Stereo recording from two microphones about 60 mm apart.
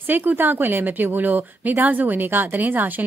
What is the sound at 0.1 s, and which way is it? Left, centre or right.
Speech, right.